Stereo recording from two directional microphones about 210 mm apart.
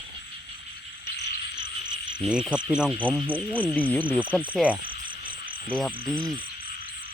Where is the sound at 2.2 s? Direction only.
Centre (ahead or behind).